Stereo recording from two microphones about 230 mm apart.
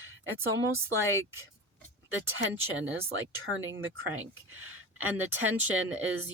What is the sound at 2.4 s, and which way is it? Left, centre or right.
Speech, right.